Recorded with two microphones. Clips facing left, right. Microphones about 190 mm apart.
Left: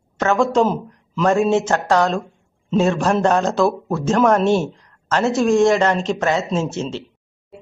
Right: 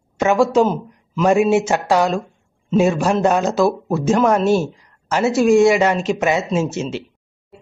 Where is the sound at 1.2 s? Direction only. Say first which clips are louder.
Right 2 dB; 15° right (ahead or behind).